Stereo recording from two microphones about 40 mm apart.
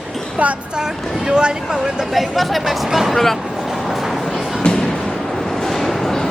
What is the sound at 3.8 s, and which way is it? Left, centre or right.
Music, centre.